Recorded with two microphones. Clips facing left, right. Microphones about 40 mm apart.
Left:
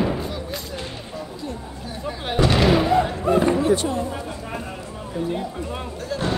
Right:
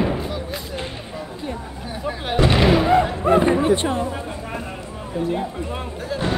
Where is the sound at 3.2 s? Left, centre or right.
Right.